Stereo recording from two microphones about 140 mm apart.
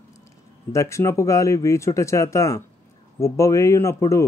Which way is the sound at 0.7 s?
20° left (ahead or behind).